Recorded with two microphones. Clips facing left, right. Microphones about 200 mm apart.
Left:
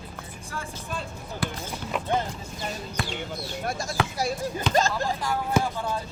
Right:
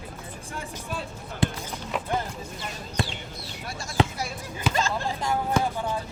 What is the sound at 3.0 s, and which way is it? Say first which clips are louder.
Basketball bounce: right 3 dB; 25° right (ahead or behind).